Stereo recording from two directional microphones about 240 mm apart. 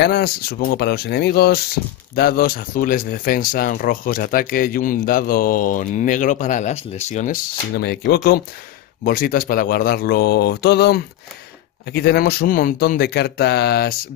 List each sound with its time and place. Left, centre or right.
0.0 s speech: left